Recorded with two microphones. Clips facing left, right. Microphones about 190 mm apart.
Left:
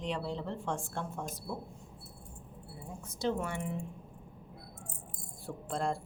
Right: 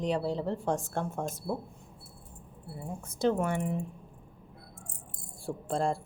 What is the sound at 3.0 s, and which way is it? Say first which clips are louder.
Speech: right 6 dB; 50° right (ahead or behind).